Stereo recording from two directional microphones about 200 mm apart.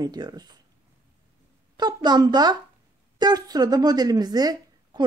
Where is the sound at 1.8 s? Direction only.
20° right (ahead or behind).